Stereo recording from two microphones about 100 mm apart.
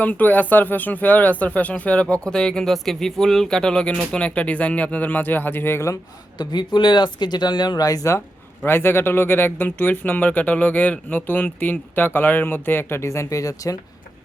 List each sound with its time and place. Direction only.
0.0 s speech: 15° left (ahead or behind)
6.4 s speech: 45° left (ahead or behind)
8.6 s speech: 20° left (ahead or behind)